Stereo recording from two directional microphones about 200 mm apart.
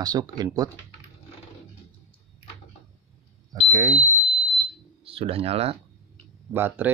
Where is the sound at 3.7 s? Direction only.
20° right (ahead or behind).